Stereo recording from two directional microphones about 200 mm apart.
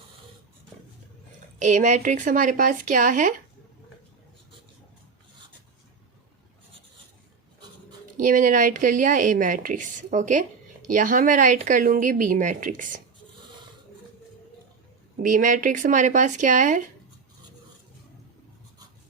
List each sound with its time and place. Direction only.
1.5 s a woman's voice: 35° right (ahead or behind)
8.2 s a woman's voice: 40° right (ahead or behind)
15.2 s a woman's voice: 40° right (ahead or behind)